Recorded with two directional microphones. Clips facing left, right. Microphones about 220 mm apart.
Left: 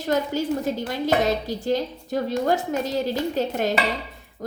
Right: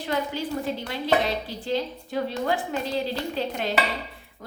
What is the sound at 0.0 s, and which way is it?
A woman's voice, 40° left (ahead or behind).